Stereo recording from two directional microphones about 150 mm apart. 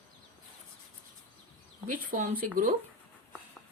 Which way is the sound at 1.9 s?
60° right (ahead or behind).